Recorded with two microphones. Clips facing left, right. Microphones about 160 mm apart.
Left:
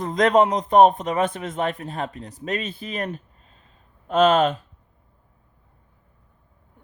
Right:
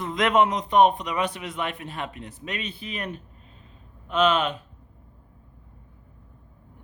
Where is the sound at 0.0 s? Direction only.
40° left (ahead or behind).